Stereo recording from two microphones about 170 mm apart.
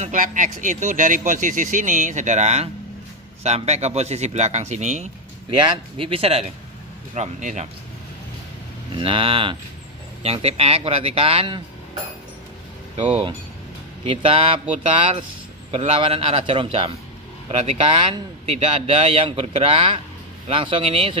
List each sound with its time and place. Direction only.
0.0 s speech: 50° right (ahead or behind)
5.6 s speech: 30° right (ahead or behind)
8.9 s speech: 30° right (ahead or behind)
12.9 s speech: 35° right (ahead or behind)